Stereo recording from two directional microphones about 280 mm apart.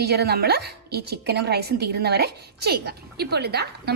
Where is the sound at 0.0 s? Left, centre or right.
Right.